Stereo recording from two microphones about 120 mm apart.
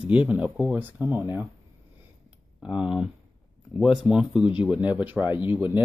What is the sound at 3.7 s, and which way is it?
Speech, 5° right (ahead or behind).